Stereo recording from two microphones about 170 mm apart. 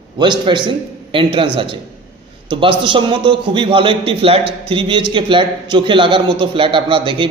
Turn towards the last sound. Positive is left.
turn(degrees=-30)  # may be behind; listen again after turning